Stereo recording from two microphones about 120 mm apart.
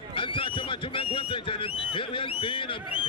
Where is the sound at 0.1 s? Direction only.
45° left (ahead or behind).